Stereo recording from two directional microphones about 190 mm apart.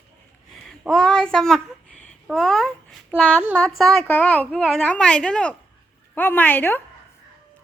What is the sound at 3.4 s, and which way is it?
Speech, centre (ahead or behind).